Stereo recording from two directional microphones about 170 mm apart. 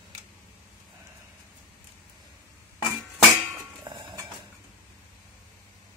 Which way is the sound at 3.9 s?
25° right (ahead or behind).